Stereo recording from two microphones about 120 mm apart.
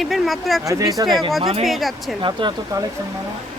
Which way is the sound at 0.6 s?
25° right (ahead or behind).